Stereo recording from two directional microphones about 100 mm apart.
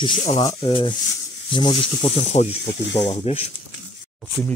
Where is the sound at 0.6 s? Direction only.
65° left (ahead or behind).